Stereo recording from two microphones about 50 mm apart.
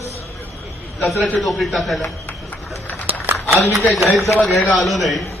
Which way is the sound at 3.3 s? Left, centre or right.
Right.